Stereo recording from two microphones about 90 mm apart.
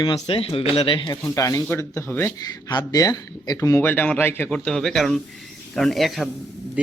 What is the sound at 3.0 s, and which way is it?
Speech, 45° left (ahead or behind).